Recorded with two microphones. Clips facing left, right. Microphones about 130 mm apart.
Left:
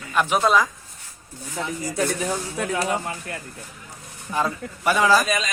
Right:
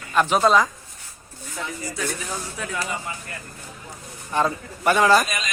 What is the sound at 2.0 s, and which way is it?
Speech, 45° left (ahead or behind).